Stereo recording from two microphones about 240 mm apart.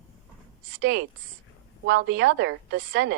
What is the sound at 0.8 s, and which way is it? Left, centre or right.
A woman's voice, right.